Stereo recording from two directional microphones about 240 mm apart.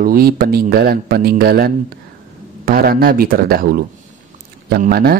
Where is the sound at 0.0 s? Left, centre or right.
Right.